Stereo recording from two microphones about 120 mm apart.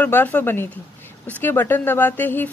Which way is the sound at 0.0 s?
15° left (ahead or behind).